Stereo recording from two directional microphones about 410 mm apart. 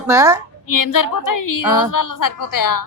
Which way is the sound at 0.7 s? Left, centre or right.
Left.